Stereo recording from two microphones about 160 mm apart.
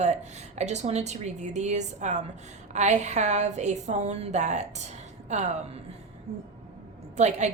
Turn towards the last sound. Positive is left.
turn(degrees=-45)  # may be behind; listen again after turning